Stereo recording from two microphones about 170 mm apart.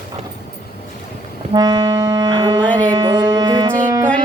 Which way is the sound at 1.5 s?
25° right (ahead or behind).